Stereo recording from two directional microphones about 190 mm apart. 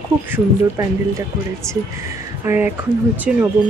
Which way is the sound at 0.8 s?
10° right (ahead or behind).